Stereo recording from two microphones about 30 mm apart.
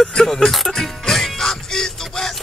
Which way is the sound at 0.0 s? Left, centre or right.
Left.